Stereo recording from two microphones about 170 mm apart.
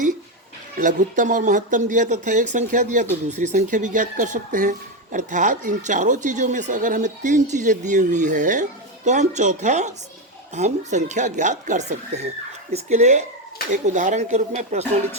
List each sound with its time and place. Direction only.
0.8 s speech: 50° right (ahead or behind)